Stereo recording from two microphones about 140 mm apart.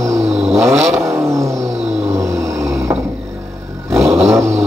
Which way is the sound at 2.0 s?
20° right (ahead or behind).